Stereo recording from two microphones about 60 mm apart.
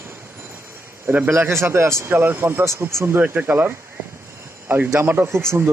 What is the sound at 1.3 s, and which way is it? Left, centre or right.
Speech, right.